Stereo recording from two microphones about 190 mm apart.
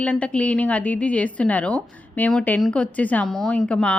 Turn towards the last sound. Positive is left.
turn(degrees=5)  # may be behind; listen again after turning